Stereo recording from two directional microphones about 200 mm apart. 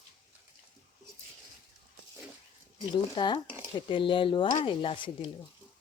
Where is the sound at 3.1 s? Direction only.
25° left (ahead or behind).